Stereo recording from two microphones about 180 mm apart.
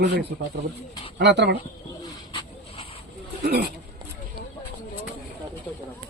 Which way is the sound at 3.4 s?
65° right (ahead or behind).